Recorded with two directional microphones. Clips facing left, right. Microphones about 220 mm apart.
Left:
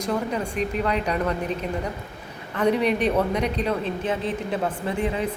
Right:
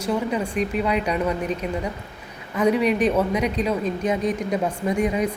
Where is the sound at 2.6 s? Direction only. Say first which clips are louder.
Right 2 dB; 10° right (ahead or behind).